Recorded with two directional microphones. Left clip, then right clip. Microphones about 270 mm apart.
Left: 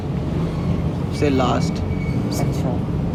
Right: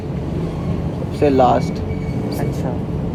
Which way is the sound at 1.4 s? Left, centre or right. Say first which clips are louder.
Right 7 dB; centre.